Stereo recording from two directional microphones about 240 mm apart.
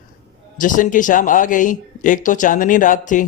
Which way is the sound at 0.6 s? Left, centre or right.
Left.